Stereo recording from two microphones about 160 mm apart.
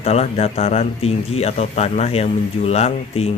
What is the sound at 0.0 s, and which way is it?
Speech, 40° left (ahead or behind).